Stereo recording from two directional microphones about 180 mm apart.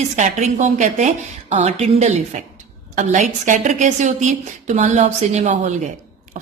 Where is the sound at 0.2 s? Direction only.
40° right (ahead or behind).